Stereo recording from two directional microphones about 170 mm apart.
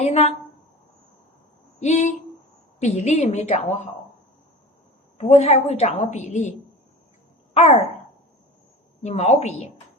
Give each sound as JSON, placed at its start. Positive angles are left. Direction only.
{"t": 0.0, "sound": "a woman's voice", "side_deg": 40}
{"t": 1.8, "sound": "a sound", "side_deg": 45}
{"t": 2.8, "sound": "a woman's voice", "side_deg": 40}
{"t": 5.1, "sound": "a woman's voice", "side_deg": 40}
{"t": 7.5, "sound": "speech", "side_deg": 40}
{"t": 9.0, "sound": "a woman's voice", "side_deg": 40}